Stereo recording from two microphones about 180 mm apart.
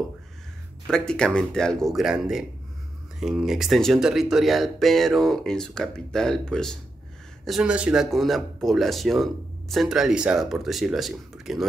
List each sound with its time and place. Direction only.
0.8 s speech: 5° left (ahead or behind)